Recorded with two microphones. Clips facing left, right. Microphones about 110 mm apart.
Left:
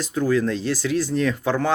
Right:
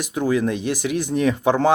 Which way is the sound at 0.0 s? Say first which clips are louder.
Even; 15° right (ahead or behind).